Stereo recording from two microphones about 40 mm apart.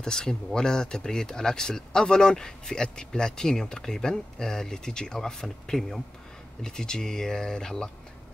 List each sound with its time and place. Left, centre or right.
0.0 s speech: centre
6.6 s speech: centre